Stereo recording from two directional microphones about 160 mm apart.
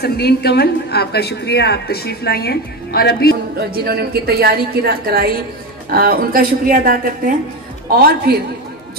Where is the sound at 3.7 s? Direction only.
80° right; by 7.3 s 60° right (ahead or behind).